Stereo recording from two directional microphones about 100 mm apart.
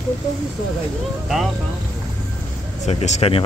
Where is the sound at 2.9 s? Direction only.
90° left.